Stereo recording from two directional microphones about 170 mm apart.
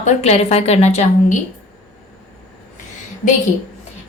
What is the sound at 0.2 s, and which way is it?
A woman's voice, 40° left (ahead or behind).